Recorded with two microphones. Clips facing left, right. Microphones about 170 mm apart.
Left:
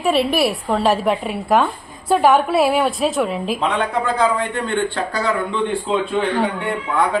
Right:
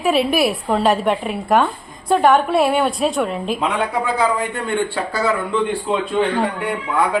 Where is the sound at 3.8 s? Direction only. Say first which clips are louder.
Left 1 dB; 10° right (ahead or behind).